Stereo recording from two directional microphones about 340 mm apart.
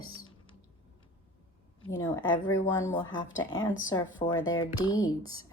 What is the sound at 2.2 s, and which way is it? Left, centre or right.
Speech, centre.